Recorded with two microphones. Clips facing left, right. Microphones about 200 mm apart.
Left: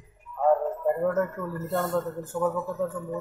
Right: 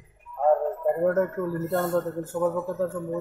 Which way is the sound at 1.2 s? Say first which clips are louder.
Right 5 dB; 30° right (ahead or behind).